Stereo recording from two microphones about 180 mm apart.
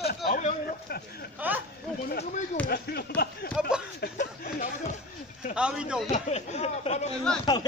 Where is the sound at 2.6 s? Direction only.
60° left (ahead or behind).